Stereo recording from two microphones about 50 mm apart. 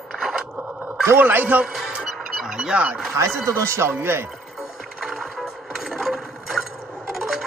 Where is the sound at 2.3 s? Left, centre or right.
Centre.